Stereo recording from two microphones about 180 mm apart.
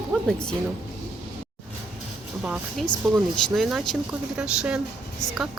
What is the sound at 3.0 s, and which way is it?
Speech, centre (ahead or behind).